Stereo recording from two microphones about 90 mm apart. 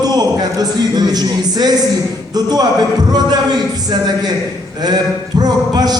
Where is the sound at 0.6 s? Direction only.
50° right (ahead or behind).